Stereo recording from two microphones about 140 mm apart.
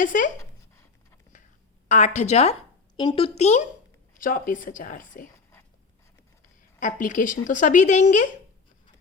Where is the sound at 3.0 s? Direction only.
40° left (ahead or behind).